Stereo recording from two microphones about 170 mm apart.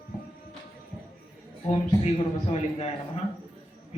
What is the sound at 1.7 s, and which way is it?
A man's voice, 35° left (ahead or behind).